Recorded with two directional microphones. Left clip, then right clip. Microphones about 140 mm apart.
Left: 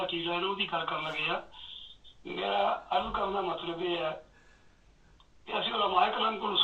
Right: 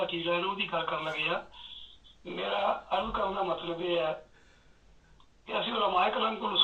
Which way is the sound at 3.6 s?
30° left (ahead or behind).